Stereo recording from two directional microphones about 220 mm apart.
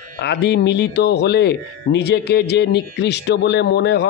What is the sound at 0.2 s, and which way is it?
Speech, 50° left (ahead or behind).